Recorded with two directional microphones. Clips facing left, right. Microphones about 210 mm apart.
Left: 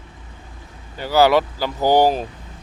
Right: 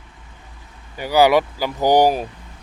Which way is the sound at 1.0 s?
15° right (ahead or behind).